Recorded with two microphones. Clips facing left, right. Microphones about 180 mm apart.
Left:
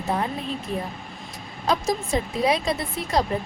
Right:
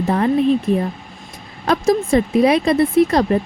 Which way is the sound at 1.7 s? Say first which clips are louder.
Right 8 dB; 60° right (ahead or behind).